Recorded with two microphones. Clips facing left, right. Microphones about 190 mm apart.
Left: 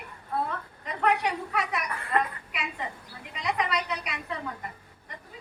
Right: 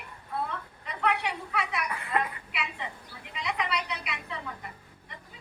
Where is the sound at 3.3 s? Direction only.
45° left (ahead or behind).